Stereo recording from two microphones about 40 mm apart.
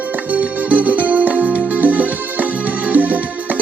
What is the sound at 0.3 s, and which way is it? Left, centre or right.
Music, right.